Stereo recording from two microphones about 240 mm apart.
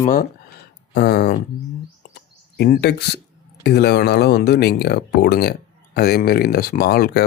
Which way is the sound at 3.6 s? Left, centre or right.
Left.